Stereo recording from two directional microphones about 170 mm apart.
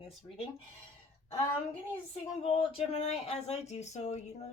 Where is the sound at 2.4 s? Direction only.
35° left (ahead or behind).